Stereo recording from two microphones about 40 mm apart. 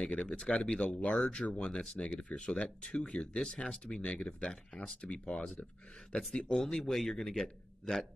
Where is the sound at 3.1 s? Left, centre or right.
Left.